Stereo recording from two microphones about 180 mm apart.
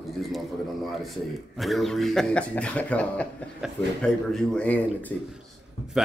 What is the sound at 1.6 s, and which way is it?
A man's voice, centre (ahead or behind).